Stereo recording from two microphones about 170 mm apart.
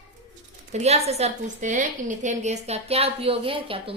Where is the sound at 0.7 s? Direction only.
40° right (ahead or behind).